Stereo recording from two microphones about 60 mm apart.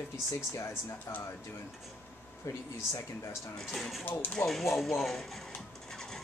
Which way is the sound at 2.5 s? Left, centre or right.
Left.